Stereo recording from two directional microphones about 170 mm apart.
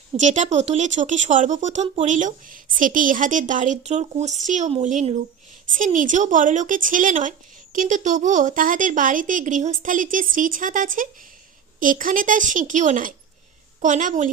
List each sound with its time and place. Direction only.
0.2 s speech: 45° right (ahead or behind)